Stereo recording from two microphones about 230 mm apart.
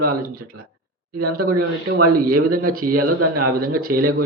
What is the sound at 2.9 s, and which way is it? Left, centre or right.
Speech, right.